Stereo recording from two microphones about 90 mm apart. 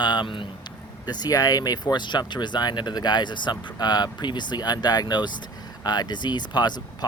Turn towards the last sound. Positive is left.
turn(degrees=50)  # may be behind; listen again after turning